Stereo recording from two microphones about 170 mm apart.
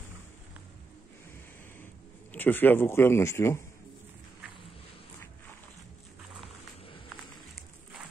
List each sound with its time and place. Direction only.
2.3 s a man's voice: 10° left (ahead or behind)